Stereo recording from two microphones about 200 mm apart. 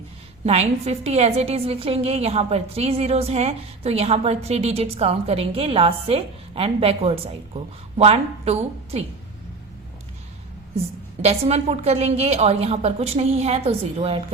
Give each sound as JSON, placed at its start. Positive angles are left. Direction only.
{"t": 0.4, "sound": "a woman's voice", "side_deg": -30}
{"t": 11.2, "sound": "a woman's voice", "side_deg": -30}